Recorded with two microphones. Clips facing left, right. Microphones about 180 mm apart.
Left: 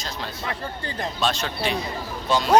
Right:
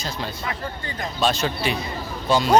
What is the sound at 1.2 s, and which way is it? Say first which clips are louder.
Speech: right 4 dB; 5° right (ahead or behind).